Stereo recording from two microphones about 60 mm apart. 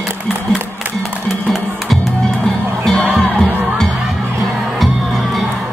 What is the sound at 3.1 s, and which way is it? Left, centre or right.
Music, centre.